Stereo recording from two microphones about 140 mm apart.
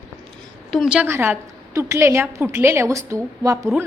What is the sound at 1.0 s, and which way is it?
A woman's voice, 15° right (ahead or behind).